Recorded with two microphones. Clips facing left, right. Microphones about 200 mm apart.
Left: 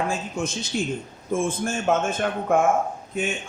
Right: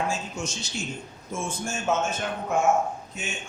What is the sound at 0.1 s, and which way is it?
A man's voice, 55° left (ahead or behind).